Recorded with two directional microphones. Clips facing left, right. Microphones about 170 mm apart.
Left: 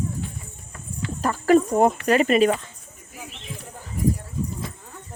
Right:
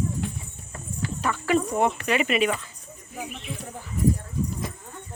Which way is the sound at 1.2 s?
40° left (ahead or behind).